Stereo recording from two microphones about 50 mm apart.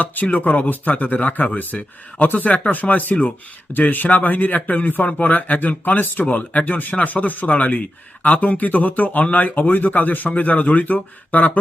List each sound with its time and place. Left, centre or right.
0.0 s speech: left